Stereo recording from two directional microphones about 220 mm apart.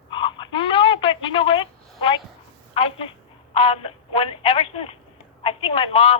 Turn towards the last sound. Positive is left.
turn(degrees=25)  # may be behind; listen again after turning